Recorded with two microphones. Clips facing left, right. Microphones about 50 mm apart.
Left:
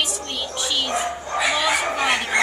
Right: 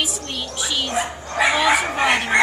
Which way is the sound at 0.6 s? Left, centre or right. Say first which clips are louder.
Right 1 dB; centre.